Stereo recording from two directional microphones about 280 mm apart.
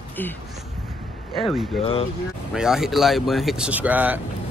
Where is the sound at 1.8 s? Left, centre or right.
Centre.